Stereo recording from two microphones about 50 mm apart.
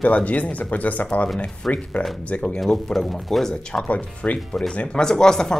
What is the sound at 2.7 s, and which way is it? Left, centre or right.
Speech, centre.